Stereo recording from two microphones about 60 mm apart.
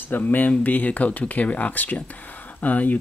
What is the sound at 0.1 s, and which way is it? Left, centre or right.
Speech, left.